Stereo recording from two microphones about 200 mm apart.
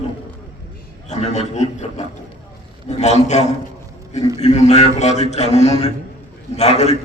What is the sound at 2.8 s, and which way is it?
A man's voice, 35° left (ahead or behind).